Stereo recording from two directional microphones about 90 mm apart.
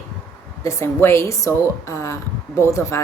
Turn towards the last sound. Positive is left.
turn(degrees=30)  # may be behind; listen again after turning